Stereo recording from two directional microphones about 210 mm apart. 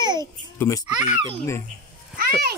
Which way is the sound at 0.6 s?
15° left (ahead or behind).